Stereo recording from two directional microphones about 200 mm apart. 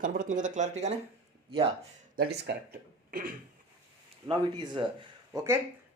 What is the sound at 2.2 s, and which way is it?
Speech, 55° right (ahead or behind).